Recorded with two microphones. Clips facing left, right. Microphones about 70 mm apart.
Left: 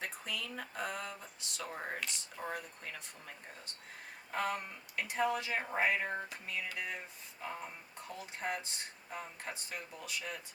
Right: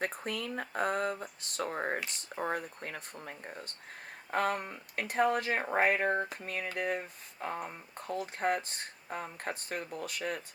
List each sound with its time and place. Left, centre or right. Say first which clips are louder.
0.0 s speech: right 6 dB; right